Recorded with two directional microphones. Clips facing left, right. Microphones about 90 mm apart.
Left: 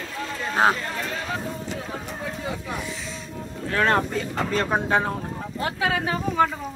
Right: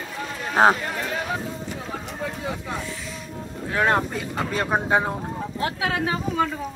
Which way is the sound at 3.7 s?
15° right (ahead or behind).